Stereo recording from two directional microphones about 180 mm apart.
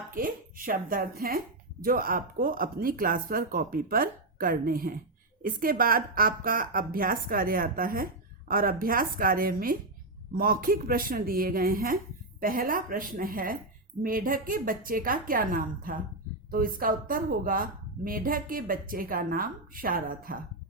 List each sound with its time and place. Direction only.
0.1 s a woman's voice: 50° right (ahead or behind)